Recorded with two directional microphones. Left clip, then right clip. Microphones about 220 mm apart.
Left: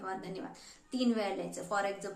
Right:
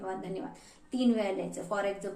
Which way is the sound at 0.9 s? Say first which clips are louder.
Right 3 dB; 15° left (ahead or behind).